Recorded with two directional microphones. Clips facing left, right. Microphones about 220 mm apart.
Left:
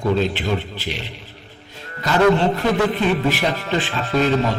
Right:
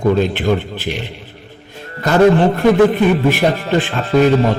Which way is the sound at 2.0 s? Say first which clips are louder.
Right 5 dB; 50° right (ahead or behind).